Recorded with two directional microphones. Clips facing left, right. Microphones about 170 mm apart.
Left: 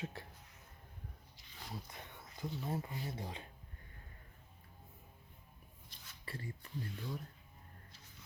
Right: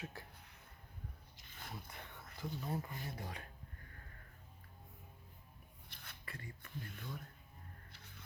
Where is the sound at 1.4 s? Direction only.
50° right (ahead or behind).